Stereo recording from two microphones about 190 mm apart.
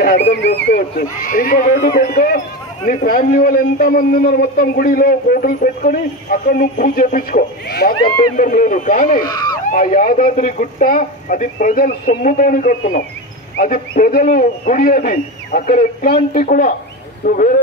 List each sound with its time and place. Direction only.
0.3 s a man's voice: 65° left (ahead or behind); by 9.2 s 45° left (ahead or behind)
9.2 s speech: 20° left (ahead or behind)
9.7 s a man's voice: 45° left (ahead or behind)